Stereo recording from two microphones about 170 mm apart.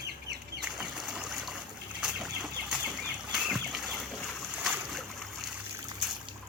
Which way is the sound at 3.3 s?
Centre (ahead or behind).